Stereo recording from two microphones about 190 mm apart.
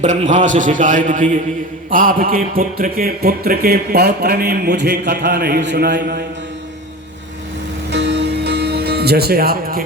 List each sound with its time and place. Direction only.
0.0 s a man's voice: 40° right (ahead or behind); by 6.2 s 55° right (ahead or behind)
7.9 s music: 65° right (ahead or behind)